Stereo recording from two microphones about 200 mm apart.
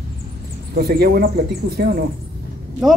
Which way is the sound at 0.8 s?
50° right (ahead or behind).